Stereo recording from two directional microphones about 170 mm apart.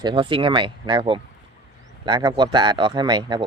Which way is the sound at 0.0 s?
30° right (ahead or behind).